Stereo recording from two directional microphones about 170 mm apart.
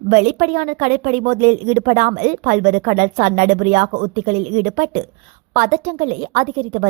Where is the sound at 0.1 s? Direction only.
50° right (ahead or behind).